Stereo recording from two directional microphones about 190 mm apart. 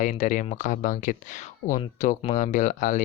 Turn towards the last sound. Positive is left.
turn(degrees=40)  # may be behind; listen again after turning